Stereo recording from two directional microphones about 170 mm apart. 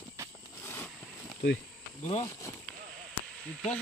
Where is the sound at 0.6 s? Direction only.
15° left (ahead or behind).